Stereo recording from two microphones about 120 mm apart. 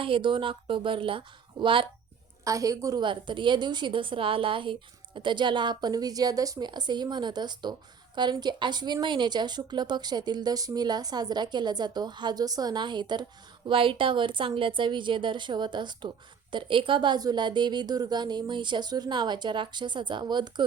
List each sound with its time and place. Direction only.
0.0 s speech: 45° right (ahead or behind)
2.4 s a woman's voice: 25° right (ahead or behind)
3.0 s a woman's voice: 40° right (ahead or behind)